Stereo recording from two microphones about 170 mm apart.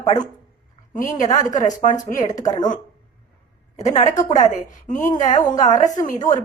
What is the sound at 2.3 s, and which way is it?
Speech, 20° left (ahead or behind).